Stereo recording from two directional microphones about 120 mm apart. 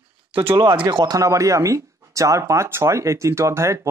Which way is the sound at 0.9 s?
35° right (ahead or behind).